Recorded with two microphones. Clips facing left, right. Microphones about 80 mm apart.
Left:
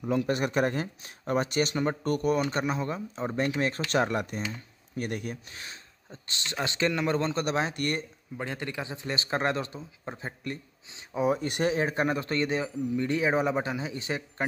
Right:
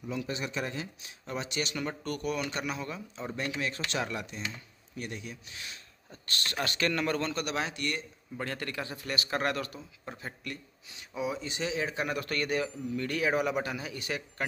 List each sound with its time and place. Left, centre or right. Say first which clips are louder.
0.0 s speech: left 8 dB; left
6.0 s speech: right 1 dB; left
7.7 s speech: left 4 dB; left
8.4 s speech: left 2 dB; centre
11.2 s speech: left 8 dB; left
12.1 s speech: left 4 dB; left